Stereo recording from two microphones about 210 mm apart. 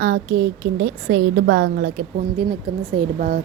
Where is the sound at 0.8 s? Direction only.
65° right (ahead or behind).